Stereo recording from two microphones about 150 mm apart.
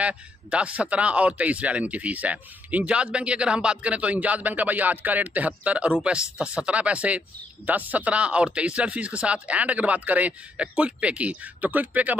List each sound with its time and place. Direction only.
0.0 s speech: 5° right (ahead or behind)